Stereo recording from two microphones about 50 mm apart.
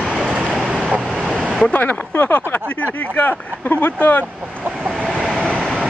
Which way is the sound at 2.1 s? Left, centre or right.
Left.